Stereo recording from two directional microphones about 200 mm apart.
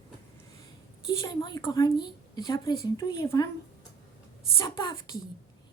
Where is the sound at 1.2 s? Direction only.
20° left (ahead or behind).